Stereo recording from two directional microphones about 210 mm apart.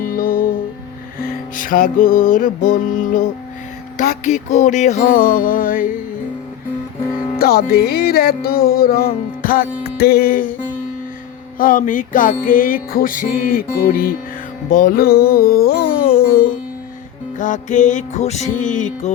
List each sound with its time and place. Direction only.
0.0 s music: 40° left (ahead or behind)
1.5 s music: 40° left (ahead or behind)
7.3 s music: 45° left (ahead or behind)
11.5 s music: 40° left (ahead or behind)